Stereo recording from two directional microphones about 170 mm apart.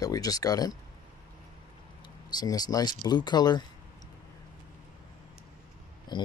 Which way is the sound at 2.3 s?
25° left (ahead or behind).